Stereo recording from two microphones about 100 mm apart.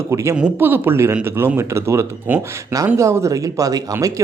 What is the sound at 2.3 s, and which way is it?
Speech, 15° right (ahead or behind).